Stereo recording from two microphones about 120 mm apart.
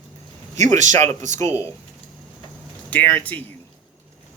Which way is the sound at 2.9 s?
15° left (ahead or behind).